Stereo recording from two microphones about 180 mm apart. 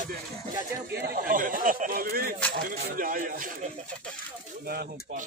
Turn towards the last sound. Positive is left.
turn(degrees=-60)  # may be behind; listen again after turning